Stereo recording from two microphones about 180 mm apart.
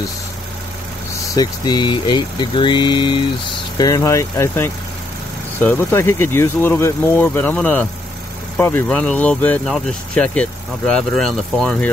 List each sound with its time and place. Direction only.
1.3 s speech: 20° left (ahead or behind); by 11.9 s 5° left (ahead or behind)